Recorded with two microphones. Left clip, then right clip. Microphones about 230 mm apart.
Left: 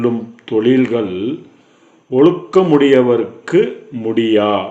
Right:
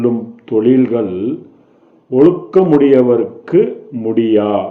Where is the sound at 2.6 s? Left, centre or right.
Left.